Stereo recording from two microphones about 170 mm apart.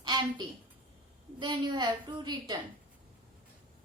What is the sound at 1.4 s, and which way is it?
A woman's voice, 25° right (ahead or behind).